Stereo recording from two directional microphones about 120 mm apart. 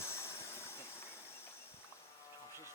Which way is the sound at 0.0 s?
20° left (ahead or behind).